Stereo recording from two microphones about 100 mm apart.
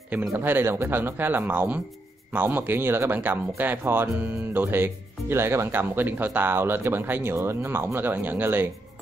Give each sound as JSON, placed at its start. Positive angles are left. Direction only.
{"t": 0.3, "sound": "speech", "side_deg": -25}